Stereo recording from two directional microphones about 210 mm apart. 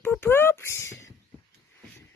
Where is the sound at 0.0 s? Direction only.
10° left (ahead or behind).